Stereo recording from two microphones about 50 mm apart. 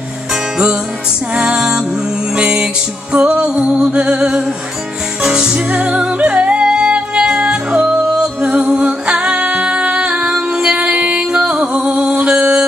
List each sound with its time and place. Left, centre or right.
1.3 s music: centre
5.9 s music: right